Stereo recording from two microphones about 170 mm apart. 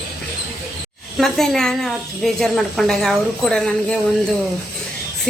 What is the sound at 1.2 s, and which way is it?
A woman's voice, centre (ahead or behind).